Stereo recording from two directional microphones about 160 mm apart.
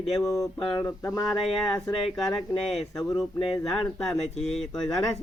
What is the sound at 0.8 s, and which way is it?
Speech, 15° left (ahead or behind).